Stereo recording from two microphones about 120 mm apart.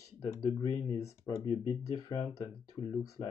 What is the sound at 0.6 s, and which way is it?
Speech, 40° left (ahead or behind).